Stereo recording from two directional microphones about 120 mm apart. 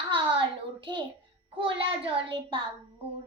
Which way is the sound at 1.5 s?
50° right (ahead or behind).